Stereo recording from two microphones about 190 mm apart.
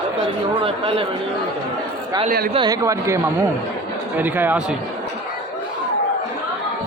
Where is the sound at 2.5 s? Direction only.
20° right (ahead or behind).